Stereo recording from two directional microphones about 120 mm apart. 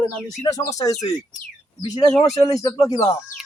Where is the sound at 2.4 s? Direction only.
30° left (ahead or behind).